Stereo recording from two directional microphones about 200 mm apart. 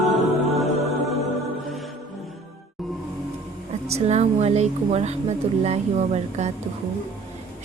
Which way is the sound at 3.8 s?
30° right (ahead or behind).